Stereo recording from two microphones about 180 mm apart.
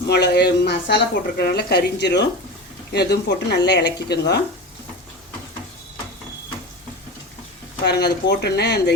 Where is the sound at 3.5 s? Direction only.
70° left (ahead or behind).